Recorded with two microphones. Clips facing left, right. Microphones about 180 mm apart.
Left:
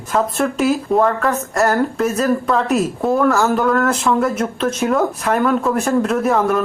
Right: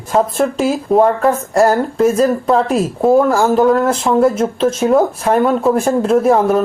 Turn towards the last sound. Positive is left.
turn(degrees=-30)  # may be behind; listen again after turning